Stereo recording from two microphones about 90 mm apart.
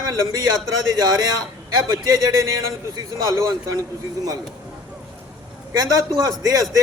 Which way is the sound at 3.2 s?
40° right (ahead or behind).